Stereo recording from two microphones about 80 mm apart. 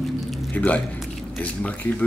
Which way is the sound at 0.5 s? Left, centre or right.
Centre.